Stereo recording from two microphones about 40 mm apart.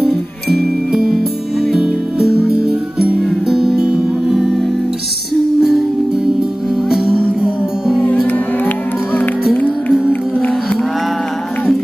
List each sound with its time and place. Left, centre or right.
0.1 s music: centre; by 2.8 s right
3.4 s music: centre
4.3 s music: centre
9.9 s music: right